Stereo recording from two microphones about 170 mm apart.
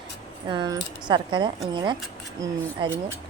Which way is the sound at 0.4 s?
25° right (ahead or behind).